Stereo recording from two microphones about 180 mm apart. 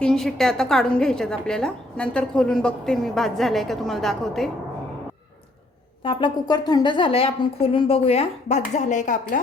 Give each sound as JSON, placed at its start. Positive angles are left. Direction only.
{"t": 0.0, "sound": "a woman's voice", "side_deg": 0}
{"t": 6.0, "sound": "speech", "side_deg": 30}